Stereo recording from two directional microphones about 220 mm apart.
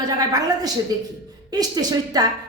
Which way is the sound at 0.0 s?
15° right (ahead or behind).